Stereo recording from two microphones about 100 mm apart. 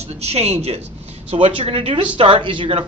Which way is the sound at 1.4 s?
60° right (ahead or behind).